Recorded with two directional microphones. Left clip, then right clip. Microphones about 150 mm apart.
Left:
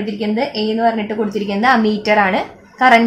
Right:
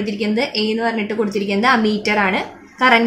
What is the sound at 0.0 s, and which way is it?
Speech, 45° left (ahead or behind).